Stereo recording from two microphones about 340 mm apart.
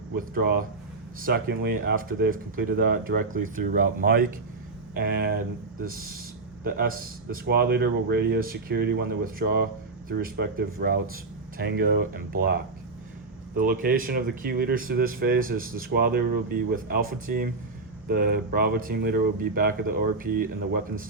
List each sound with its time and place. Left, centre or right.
0.3 s speech: right